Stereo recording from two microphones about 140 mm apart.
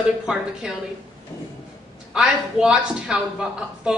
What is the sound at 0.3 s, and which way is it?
Speech, 5° right (ahead or behind).